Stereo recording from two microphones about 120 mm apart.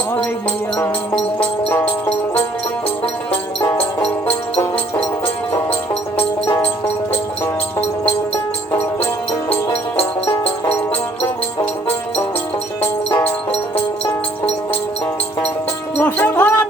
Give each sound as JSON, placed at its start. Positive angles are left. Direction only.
{"t": 1.1, "sound": "music", "side_deg": 10}
{"t": 3.8, "sound": "music", "side_deg": 10}
{"t": 6.4, "sound": "music", "side_deg": 20}
{"t": 9.5, "sound": "music", "side_deg": 15}
{"t": 16.0, "sound": "music", "side_deg": 15}